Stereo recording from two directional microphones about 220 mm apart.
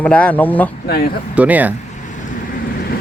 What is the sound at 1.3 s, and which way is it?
Speech, 5° right (ahead or behind).